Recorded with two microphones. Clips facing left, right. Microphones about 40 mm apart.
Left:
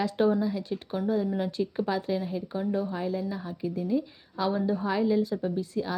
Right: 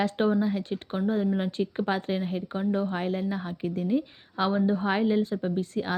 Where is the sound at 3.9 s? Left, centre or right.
Right.